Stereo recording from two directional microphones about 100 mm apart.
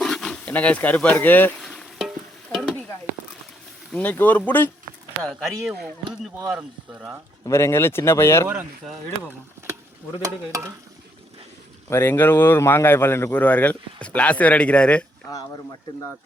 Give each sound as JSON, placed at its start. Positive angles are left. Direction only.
{"t": 0.0, "sound": "wild animals", "side_deg": 5}
{"t": 0.4, "sound": "speech", "side_deg": 15}
{"t": 1.6, "sound": "a sound", "side_deg": 0}
{"t": 3.9, "sound": "speech", "side_deg": 15}
{"t": 5.2, "sound": "speech", "side_deg": 0}
{"t": 6.5, "sound": "speech", "side_deg": -10}
{"t": 7.4, "sound": "speech", "side_deg": 25}
{"t": 8.4, "sound": "speech", "side_deg": -15}
{"t": 11.9, "sound": "speech", "side_deg": 20}